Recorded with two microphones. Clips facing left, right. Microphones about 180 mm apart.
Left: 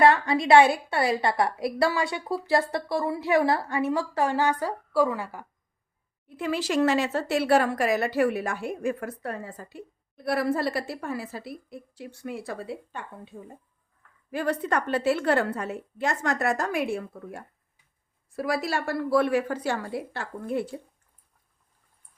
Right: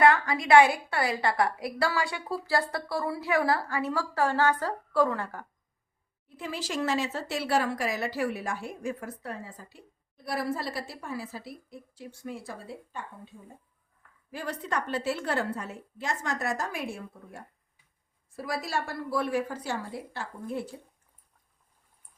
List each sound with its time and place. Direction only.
0.0 s a woman's voice: 25° left (ahead or behind); by 5.5 s 10° left (ahead or behind)
6.2 s a woman's voice: 65° left (ahead or behind)